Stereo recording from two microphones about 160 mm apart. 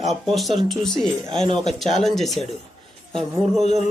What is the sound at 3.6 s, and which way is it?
Speech, 45° left (ahead or behind).